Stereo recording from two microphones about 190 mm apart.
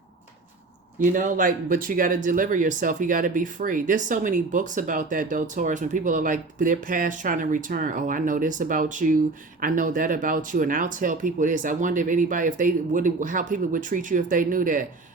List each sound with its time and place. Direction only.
0.9 s speech: 45° right (ahead or behind)